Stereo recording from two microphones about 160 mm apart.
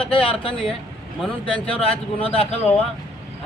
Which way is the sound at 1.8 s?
35° left (ahead or behind).